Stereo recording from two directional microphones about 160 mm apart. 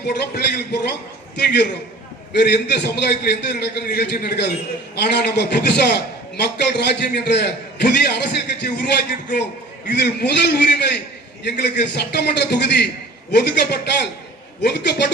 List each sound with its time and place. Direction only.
0.1 s a man's voice: 90° left
2.3 s a man's voice: 90° left